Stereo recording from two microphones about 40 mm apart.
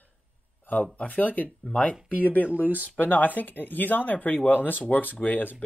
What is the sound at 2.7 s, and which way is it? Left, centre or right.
Speech, left.